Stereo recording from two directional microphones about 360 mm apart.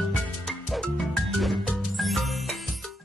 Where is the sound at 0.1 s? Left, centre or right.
Centre.